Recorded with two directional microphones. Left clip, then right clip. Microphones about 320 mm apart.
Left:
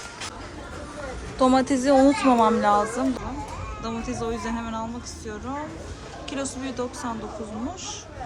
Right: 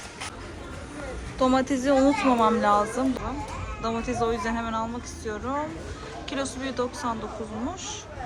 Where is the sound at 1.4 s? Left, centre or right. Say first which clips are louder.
Left 3 dB; centre.